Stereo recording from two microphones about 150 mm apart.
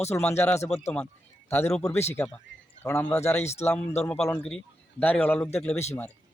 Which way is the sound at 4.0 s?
5° left (ahead or behind).